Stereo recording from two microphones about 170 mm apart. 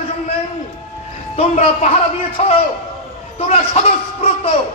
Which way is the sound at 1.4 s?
40° left (ahead or behind).